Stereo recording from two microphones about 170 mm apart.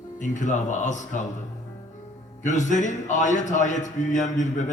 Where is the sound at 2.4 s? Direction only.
45° left (ahead or behind).